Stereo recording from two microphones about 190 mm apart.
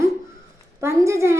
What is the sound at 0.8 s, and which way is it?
Speech, 15° right (ahead or behind).